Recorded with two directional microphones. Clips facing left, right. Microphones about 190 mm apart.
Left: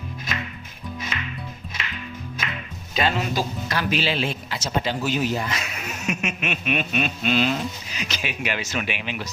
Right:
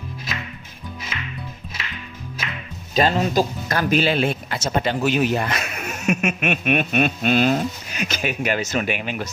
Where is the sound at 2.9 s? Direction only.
40° right (ahead or behind).